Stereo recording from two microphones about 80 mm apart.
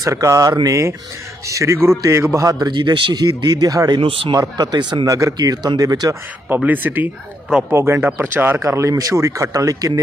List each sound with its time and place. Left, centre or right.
0.0 s a man's voice: right
2.6 s a man's voice: right
4.0 s speech: right
4.4 s a man's voice: right
5.0 s speech: right
6.7 s speech: right
8.5 s speech: right